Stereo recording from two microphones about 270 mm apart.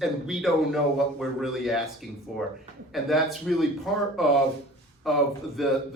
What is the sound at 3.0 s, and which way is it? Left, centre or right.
Speech, centre.